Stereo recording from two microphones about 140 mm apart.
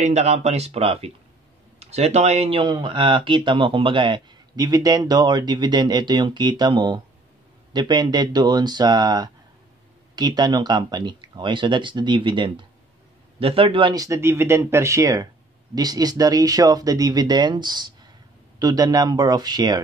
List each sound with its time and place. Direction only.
0.0 s speech: 50° right (ahead or behind)
2.6 s speech: 35° right (ahead or behind)